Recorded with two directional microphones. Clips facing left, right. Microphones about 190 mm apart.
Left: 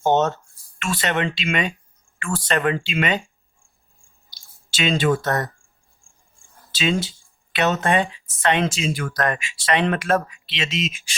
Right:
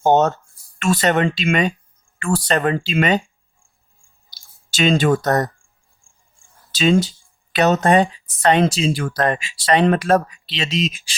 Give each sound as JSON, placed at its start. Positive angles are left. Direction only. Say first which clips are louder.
{"t": 0.0, "sound": "speech", "louder": "right 4 dB", "side_deg": -45}
{"t": 4.7, "sound": "speech", "louder": "right 4 dB", "side_deg": -45}
{"t": 6.7, "sound": "speech", "louder": "right 6 dB", "side_deg": -40}